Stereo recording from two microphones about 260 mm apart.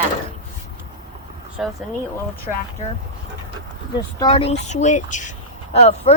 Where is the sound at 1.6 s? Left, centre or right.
Centre.